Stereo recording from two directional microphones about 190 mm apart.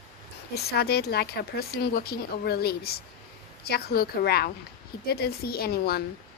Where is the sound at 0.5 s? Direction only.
55° left (ahead or behind).